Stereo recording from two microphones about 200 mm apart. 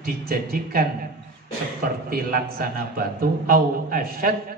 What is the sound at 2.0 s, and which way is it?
A man's voice, 45° right (ahead or behind).